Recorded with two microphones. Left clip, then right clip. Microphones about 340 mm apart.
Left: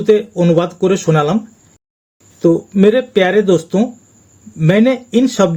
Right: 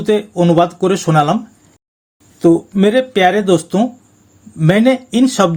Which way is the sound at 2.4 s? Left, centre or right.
Right.